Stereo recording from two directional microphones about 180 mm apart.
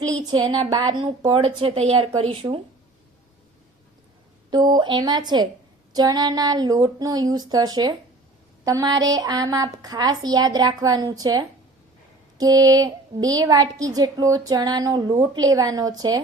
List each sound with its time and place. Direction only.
0.3 s a woman's voice: 20° right (ahead or behind)
4.5 s a woman's voice: 25° right (ahead or behind)